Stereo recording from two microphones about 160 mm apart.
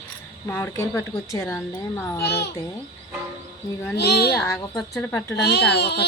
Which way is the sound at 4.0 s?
90° left.